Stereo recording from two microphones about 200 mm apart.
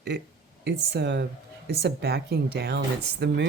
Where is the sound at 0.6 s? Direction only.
55° right (ahead or behind).